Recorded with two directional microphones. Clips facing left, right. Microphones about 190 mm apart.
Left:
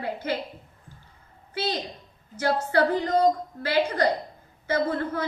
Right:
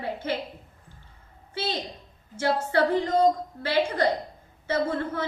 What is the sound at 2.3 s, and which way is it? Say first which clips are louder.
A woman's voice: left 1 dB; 25° right (ahead or behind).